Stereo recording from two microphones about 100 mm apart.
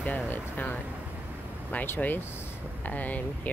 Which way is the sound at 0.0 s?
20° left (ahead or behind).